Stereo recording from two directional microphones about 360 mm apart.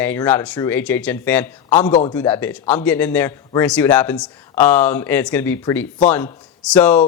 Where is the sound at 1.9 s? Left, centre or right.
Centre.